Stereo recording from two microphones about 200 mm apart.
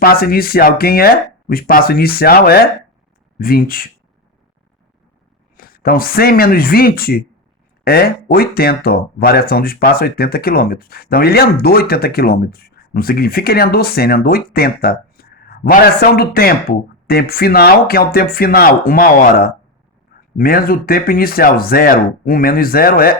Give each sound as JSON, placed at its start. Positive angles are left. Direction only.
{"t": 0.0, "sound": "speech", "side_deg": 50}
{"t": 5.5, "sound": "speech", "side_deg": 45}